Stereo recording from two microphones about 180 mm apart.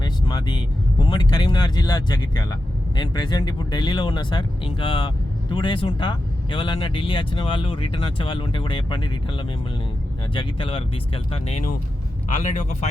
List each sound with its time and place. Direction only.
0.0 s speech: 25° left (ahead or behind)
10.3 s speech: 30° left (ahead or behind)